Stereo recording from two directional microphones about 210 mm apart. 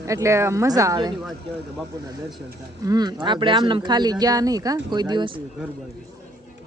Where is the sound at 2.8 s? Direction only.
20° right (ahead or behind).